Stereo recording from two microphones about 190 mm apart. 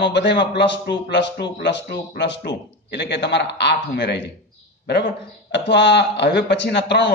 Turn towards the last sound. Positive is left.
turn(degrees=60)  # may be behind; listen again after turning